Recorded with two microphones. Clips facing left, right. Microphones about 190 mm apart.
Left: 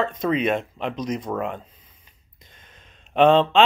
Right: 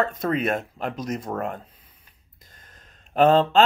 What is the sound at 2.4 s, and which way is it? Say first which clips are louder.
Gasp: left 1 dB; 45° right (ahead or behind).